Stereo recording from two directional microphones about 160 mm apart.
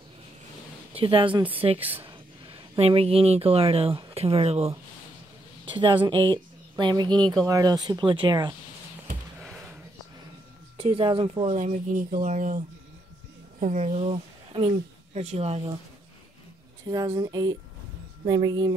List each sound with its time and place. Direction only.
0.9 s speech: 35° right (ahead or behind)
5.7 s speech: 30° right (ahead or behind)
10.8 s speech: 35° right (ahead or behind)
11.5 s speech: 55° right (ahead or behind)
16.9 s speech: 25° right (ahead or behind)